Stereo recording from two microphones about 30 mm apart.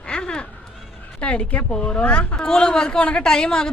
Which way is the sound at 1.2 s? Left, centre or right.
Left.